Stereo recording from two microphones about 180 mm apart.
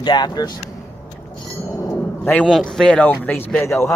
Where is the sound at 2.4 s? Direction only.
Centre (ahead or behind).